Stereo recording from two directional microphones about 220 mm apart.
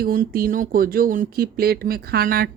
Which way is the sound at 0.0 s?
40° right (ahead or behind).